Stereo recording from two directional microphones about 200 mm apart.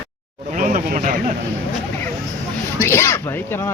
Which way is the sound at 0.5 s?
40° right (ahead or behind).